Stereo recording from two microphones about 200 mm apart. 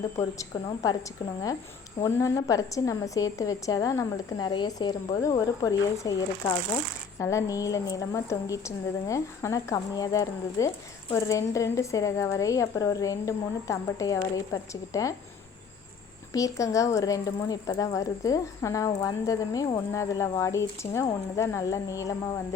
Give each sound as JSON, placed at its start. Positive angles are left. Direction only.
{"t": 0.2, "sound": "speech", "side_deg": 15}
{"t": 16.3, "sound": "speech", "side_deg": 15}